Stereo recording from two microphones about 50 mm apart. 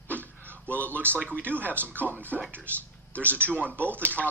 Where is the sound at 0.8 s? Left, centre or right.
Right.